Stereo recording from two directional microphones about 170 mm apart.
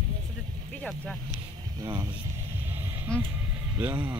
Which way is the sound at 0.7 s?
5° left (ahead or behind).